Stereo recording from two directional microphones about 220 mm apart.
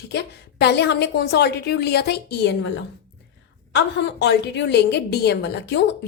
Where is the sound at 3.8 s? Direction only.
50° left (ahead or behind).